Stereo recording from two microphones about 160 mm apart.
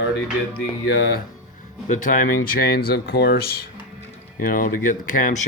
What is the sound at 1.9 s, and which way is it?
Speech, 55° left (ahead or behind).